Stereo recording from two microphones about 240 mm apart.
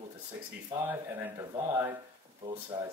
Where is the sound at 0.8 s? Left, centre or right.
Centre.